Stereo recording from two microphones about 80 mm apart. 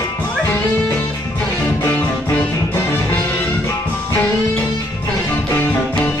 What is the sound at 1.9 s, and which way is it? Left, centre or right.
Music, centre.